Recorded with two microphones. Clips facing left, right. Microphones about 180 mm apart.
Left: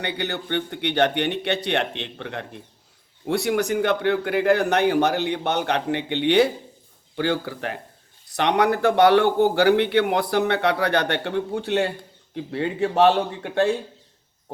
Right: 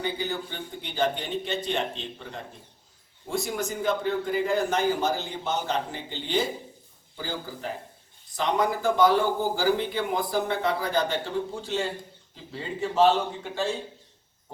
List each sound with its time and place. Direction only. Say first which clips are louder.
0.0 s a man's voice: left 2 dB; 70° left (ahead or behind)